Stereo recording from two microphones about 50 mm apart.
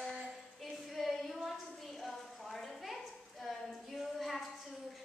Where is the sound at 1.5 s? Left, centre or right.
Centre.